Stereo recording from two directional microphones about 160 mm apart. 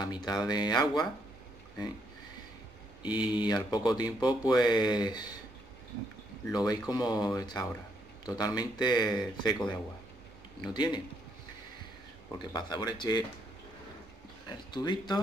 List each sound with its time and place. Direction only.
0.0 s speech: 25° left (ahead or behind)
3.0 s speech: 30° left (ahead or behind)
6.5 s speech: 25° left (ahead or behind)
12.5 s speech: 25° left (ahead or behind)
14.7 s speech: 25° left (ahead or behind)